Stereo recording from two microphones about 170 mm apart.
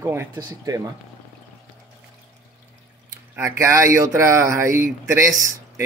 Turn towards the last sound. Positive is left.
turn(degrees=-15)  # may be behind; listen again after turning